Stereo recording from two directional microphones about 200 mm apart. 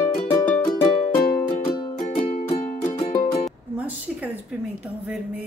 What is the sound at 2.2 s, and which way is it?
Music, 40° left (ahead or behind).